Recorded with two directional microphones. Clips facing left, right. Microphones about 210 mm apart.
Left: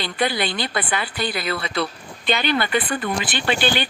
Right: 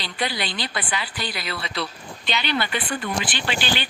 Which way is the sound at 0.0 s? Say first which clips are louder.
Left 5 dB; 50° left (ahead or behind).